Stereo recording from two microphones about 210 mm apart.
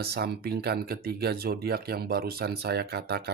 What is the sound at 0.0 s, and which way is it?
Speech, 50° right (ahead or behind).